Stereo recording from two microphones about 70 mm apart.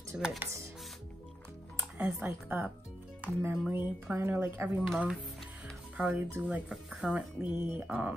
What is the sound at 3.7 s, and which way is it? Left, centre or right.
Speech, right.